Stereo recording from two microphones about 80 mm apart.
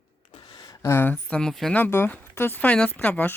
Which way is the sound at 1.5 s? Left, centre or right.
Centre.